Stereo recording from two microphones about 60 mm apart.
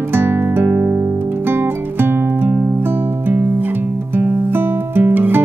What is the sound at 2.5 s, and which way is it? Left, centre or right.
Music, right.